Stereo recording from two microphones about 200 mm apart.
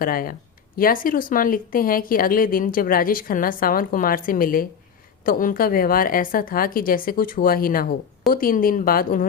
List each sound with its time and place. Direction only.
0.0 s a woman's voice: 45° left (ahead or behind)